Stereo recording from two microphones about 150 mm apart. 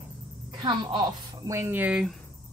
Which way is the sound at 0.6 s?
30° right (ahead or behind).